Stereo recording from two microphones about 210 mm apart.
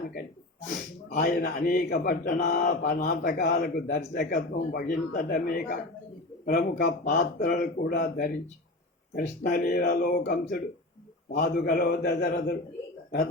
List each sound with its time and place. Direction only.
1.1 s speech: 45° left (ahead or behind)